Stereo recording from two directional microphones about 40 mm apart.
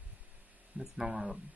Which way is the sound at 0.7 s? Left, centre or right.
Centre.